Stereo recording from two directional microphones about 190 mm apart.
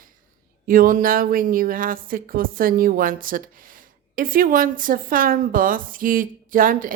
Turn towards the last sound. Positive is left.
turn(degrees=-45)  # may be behind; listen again after turning